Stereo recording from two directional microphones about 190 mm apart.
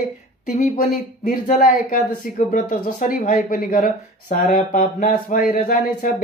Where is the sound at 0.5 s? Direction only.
45° left (ahead or behind).